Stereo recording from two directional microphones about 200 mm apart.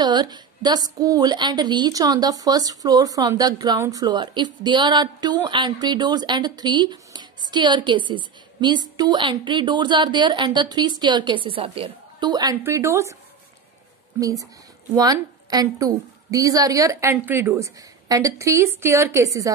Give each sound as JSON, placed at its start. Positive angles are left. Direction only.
{"t": 0.0, "sound": "a woman's voice", "side_deg": -20}
{"t": 15.0, "sound": "a woman's voice", "side_deg": -20}